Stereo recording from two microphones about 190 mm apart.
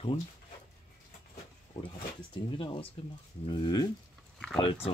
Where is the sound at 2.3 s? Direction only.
25° left (ahead or behind).